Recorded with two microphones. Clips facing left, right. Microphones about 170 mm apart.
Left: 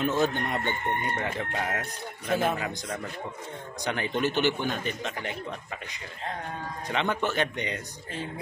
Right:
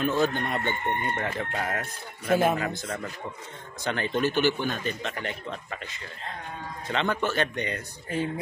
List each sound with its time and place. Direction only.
0.2 s speech: 20° left (ahead or behind)
2.2 s speech: 10° right (ahead or behind)
2.6 s speech: 10° left (ahead or behind)
6.9 s speech: 15° left (ahead or behind)